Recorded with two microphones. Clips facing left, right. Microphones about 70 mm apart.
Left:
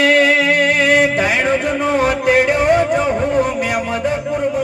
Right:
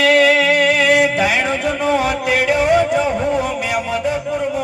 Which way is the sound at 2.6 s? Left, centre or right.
Centre.